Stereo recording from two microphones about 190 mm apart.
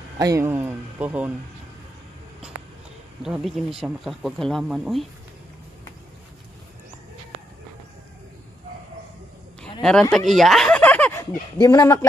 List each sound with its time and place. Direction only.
0.2 s speech: 15° right (ahead or behind)
3.2 s speech: centre (ahead or behind)
9.6 s a sound: 5° left (ahead or behind)
11.6 s speech: 15° left (ahead or behind)